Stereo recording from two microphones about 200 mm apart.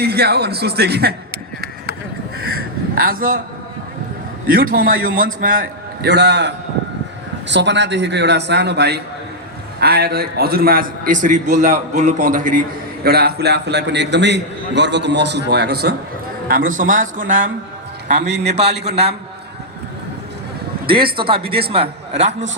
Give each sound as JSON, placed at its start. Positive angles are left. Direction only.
{"t": 0.0, "sound": "speech", "side_deg": -55}
{"t": 2.9, "sound": "speech", "side_deg": -45}
{"t": 4.4, "sound": "a man's voice", "side_deg": -45}
{"t": 6.1, "sound": "a man's voice", "side_deg": -60}
{"t": 13.1, "sound": "a man's voice", "side_deg": -55}
{"t": 16.5, "sound": "a man's voice", "side_deg": -45}
{"t": 18.2, "sound": "a man's voice", "side_deg": -60}
{"t": 21.2, "sound": "speech", "side_deg": -25}